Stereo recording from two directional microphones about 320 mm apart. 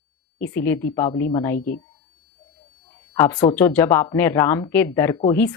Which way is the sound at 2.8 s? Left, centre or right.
Centre.